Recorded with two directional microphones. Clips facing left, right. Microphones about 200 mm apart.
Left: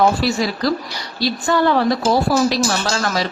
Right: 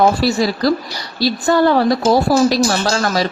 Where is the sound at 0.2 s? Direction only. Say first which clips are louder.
Right 3 dB; 40° right (ahead or behind).